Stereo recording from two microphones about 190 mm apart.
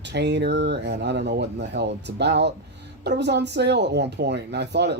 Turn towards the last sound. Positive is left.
turn(degrees=-65)  # may be behind; listen again after turning